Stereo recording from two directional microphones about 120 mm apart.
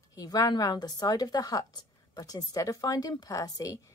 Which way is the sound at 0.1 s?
30° left (ahead or behind).